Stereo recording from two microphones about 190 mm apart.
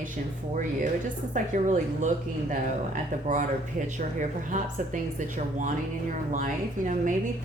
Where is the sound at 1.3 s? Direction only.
40° right (ahead or behind).